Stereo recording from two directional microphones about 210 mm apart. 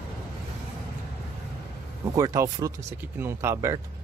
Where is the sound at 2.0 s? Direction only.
15° right (ahead or behind).